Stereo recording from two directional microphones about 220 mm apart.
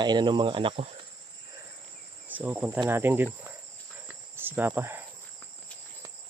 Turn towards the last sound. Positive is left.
turn(degrees=-10)  # may be behind; listen again after turning